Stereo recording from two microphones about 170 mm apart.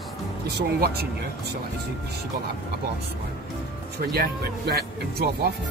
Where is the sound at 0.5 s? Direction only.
70° right (ahead or behind).